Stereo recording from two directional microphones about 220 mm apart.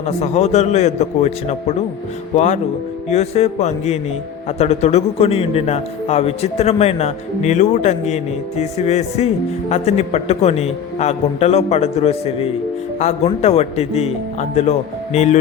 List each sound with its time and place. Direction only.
0.0 s speech: 30° left (ahead or behind)